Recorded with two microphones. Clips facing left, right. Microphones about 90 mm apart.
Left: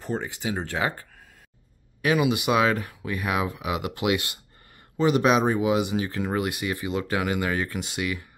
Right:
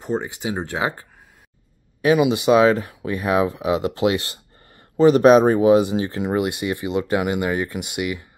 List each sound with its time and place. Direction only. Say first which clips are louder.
0.0 s speech: right 5 dB; 20° right (ahead or behind)